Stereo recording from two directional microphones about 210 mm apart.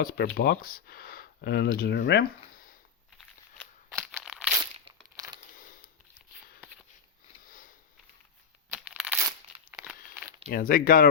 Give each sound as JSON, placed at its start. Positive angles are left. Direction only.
{"t": 0.0, "sound": "speech", "side_deg": 45}
{"t": 3.9, "sound": "crumpling", "side_deg": 5}
{"t": 4.9, "sound": "crumpling", "side_deg": -20}
{"t": 5.5, "sound": "a sound", "side_deg": 40}
{"t": 7.4, "sound": "sniff", "side_deg": 40}
{"t": 8.7, "sound": "a sound", "side_deg": 0}
{"t": 10.5, "sound": "speech", "side_deg": 45}